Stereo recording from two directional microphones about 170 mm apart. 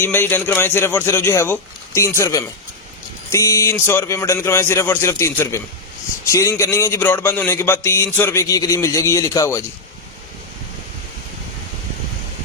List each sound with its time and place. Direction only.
0.0 s a man's voice: 15° left (ahead or behind)